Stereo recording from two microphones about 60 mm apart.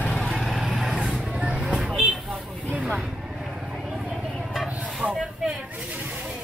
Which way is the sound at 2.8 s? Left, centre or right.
Centre.